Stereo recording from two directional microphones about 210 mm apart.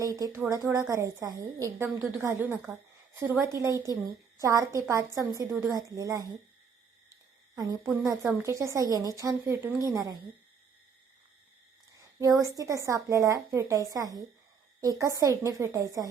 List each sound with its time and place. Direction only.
0.0 s a woman's voice: 15° right (ahead or behind)
7.5 s a woman's voice: 15° right (ahead or behind)
12.2 s a woman's voice: 15° right (ahead or behind)